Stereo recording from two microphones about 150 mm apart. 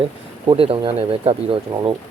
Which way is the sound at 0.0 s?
40° right (ahead or behind).